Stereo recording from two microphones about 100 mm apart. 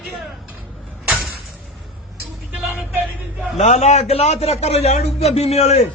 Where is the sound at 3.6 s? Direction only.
90° left.